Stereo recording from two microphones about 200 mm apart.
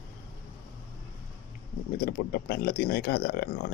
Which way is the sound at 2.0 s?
50° left (ahead or behind).